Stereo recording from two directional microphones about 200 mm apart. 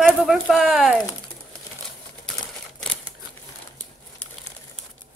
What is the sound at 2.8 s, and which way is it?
Crumpling, 5° left (ahead or behind).